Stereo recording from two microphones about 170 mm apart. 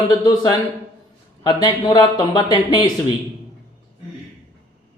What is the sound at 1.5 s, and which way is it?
Speech, 25° left (ahead or behind).